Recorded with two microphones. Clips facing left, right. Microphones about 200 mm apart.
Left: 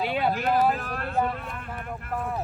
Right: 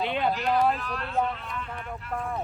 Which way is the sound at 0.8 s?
50° left (ahead or behind).